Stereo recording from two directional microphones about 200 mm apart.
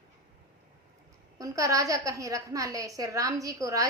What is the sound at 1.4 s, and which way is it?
A woman's voice, 15° right (ahead or behind).